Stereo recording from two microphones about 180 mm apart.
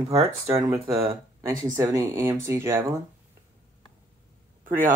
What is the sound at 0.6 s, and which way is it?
Speech, 20° right (ahead or behind).